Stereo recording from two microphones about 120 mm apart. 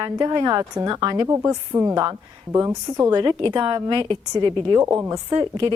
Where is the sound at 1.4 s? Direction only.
20° right (ahead or behind).